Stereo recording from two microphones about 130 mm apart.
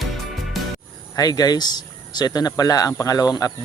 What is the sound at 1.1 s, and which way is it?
Speech, 30° left (ahead or behind).